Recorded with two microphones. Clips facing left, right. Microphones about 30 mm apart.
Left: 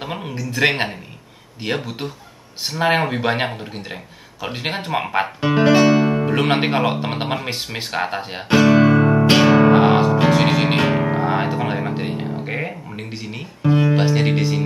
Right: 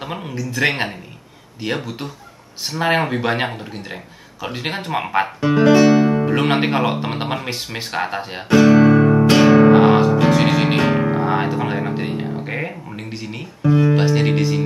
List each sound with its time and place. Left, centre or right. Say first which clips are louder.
0.0 s speech: right 1 dB; centre
5.4 s music: right 2 dB; left
5.9 s speech: right 2 dB; centre
8.5 s music: right 2 dB; centre
12.4 s a sound: even; centre
13.6 s music: right 1 dB; centre
13.8 s music: right 1 dB; centre